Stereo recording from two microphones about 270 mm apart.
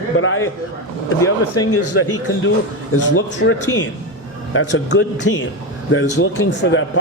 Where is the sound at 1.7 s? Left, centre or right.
Left.